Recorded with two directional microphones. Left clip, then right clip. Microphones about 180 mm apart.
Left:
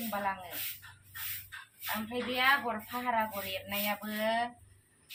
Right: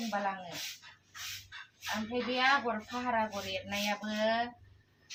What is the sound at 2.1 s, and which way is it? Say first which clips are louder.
A woman's voice: left 1 dB; 10° right (ahead or behind).